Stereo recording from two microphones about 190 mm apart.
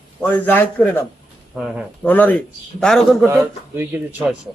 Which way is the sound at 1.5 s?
Centre (ahead or behind).